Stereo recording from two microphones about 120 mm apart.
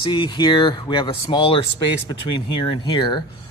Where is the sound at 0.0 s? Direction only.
40° left (ahead or behind).